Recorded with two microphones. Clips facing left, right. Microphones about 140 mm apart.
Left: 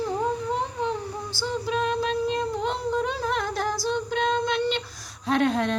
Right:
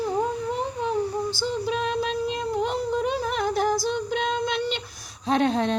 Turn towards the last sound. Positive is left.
turn(degrees=-25)  # may be behind; listen again after turning